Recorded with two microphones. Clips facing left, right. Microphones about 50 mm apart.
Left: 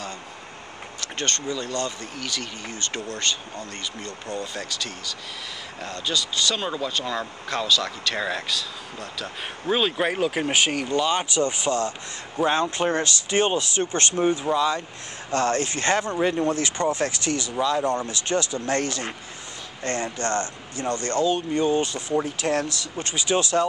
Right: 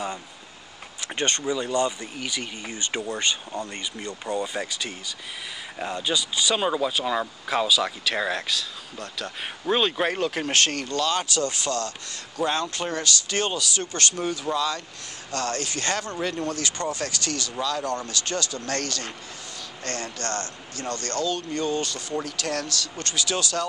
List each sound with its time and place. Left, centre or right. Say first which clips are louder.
1.0 s speech: right 2 dB; centre; by 23.7 s left